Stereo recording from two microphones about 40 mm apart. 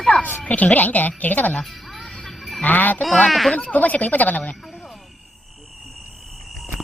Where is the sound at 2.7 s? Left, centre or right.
Left.